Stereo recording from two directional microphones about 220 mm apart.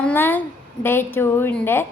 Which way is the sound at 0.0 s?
10° left (ahead or behind).